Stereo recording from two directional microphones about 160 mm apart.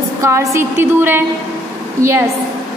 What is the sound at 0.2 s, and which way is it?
A woman's voice, 20° right (ahead or behind).